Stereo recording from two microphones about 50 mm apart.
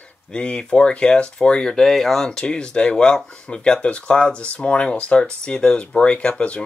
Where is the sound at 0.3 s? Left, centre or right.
Centre.